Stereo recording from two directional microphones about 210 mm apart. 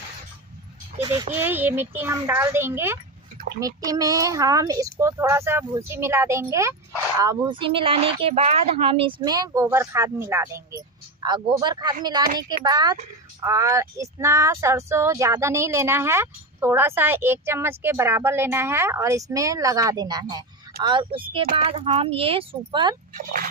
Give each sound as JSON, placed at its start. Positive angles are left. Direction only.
{"t": 0.9, "sound": "speech", "side_deg": -20}